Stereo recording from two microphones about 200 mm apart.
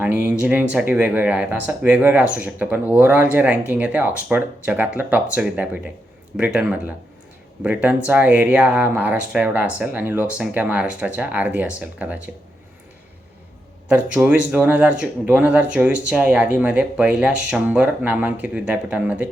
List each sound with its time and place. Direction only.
0.0 s speech: 10° right (ahead or behind)
13.8 s speech: 5° right (ahead or behind)